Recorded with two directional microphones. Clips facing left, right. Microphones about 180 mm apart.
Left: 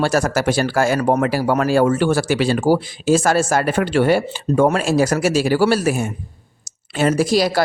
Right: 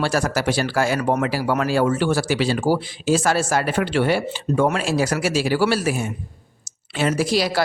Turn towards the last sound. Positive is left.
turn(degrees=45)  # may be behind; listen again after turning